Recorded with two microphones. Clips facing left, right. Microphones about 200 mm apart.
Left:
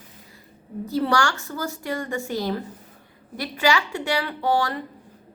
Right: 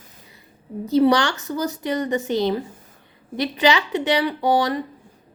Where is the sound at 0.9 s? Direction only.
20° right (ahead or behind).